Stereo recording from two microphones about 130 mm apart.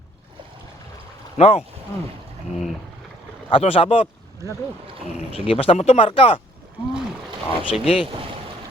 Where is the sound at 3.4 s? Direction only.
45° left (ahead or behind).